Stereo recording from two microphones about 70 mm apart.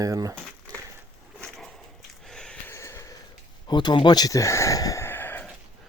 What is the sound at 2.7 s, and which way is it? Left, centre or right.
Snort, left.